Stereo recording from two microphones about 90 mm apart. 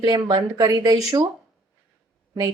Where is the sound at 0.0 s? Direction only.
50° right (ahead or behind).